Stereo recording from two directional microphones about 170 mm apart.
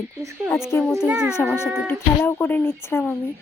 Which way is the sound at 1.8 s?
10° left (ahead or behind).